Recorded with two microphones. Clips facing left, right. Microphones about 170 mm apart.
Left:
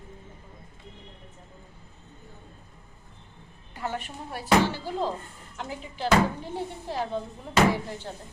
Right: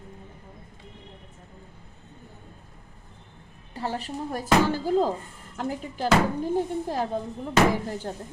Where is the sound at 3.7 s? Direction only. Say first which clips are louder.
Right 3 dB; 30° right (ahead or behind).